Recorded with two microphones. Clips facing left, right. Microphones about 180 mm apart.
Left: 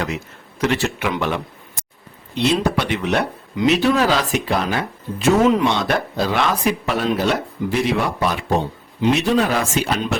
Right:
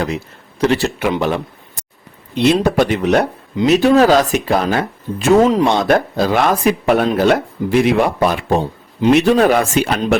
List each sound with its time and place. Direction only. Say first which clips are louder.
0.6 s speech: right 5 dB; 35° right (ahead or behind)
2.3 s speech: right 5 dB; 45° right (ahead or behind)